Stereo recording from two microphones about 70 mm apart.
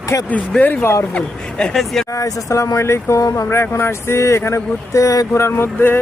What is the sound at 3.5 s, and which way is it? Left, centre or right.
Speech, left.